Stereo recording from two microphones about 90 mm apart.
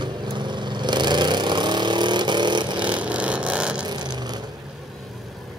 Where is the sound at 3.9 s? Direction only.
50° right (ahead or behind).